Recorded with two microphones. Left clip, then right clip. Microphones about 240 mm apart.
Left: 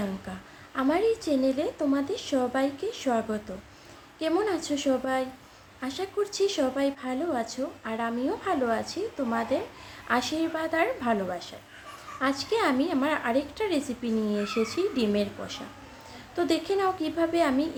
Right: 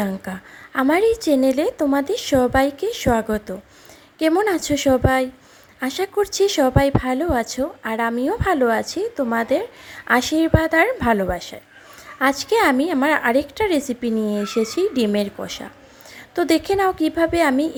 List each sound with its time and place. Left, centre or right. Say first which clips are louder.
0.0 s a woman's voice: right 9 dB; right